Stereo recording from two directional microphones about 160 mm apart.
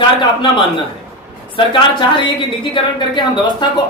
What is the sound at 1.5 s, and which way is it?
A man's voice, 30° left (ahead or behind).